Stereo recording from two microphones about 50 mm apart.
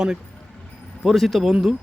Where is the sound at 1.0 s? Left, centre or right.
Centre.